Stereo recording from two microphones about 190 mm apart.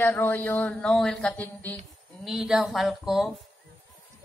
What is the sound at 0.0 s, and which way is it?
A woman's voice, 10° left (ahead or behind).